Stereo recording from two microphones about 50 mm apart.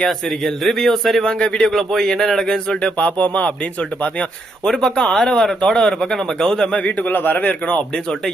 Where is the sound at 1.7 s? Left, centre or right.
Centre.